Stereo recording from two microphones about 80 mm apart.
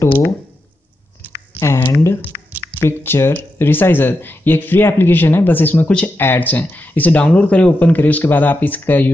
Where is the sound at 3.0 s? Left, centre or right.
Left.